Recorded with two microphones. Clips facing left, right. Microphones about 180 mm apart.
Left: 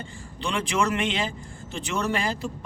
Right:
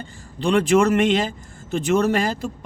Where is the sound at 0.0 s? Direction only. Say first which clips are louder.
Right 8 dB; 40° right (ahead or behind).